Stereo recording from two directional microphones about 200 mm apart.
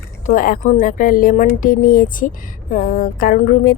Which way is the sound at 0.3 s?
45° left (ahead or behind).